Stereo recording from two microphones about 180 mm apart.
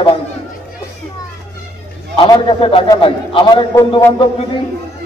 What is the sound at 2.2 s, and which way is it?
A man's voice, 25° left (ahead or behind).